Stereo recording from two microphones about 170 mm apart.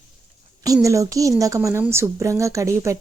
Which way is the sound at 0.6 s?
20° right (ahead or behind).